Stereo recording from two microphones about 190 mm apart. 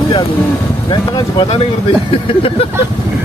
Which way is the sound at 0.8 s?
25° left (ahead or behind).